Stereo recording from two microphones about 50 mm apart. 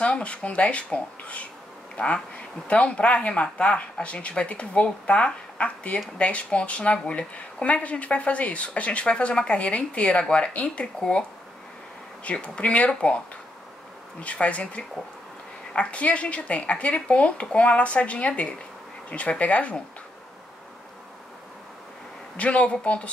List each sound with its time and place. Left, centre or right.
0.0 s a woman's voice: left
12.3 s a woman's voice: left
14.2 s a woman's voice: left
22.4 s a woman's voice: left